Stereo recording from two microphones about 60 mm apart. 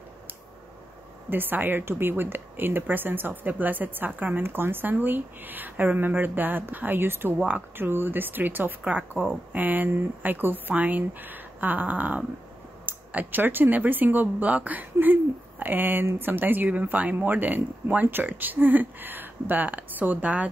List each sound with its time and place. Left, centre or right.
1.3 s a woman's voice: right